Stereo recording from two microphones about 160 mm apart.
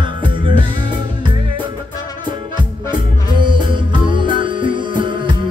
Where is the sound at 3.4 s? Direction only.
30° right (ahead or behind).